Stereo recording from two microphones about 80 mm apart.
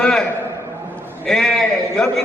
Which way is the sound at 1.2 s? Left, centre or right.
Centre.